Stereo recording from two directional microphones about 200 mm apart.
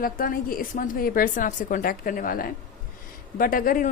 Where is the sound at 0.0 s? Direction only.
45° left (ahead or behind).